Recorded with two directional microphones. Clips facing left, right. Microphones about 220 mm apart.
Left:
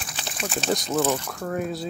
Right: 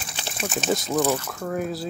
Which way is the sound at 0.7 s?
Centre (ahead or behind).